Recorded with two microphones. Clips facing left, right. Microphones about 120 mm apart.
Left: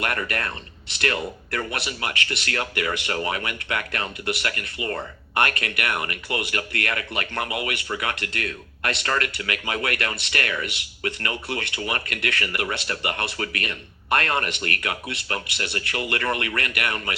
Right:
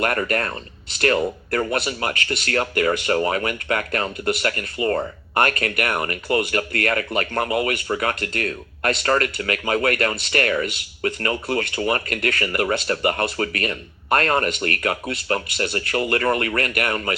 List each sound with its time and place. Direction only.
0.0 s speech: 40° right (ahead or behind)